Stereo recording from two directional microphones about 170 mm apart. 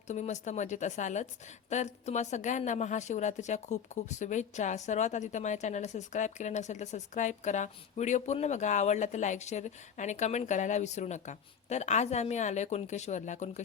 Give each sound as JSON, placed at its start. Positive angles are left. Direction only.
{"t": 0.1, "sound": "speech", "side_deg": 45}